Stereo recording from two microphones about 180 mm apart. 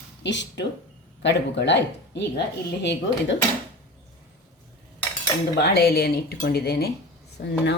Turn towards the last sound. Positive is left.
turn(degrees=70)  # may be behind; listen again after turning